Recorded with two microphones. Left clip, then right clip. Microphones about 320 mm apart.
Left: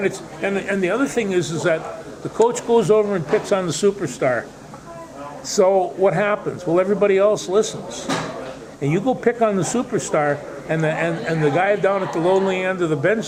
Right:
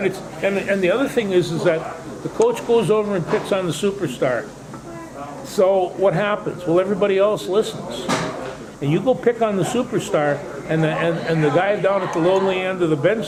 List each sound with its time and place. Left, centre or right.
0.0 s a man's voice: left
5.5 s a man's voice: left
8.8 s a man's voice: left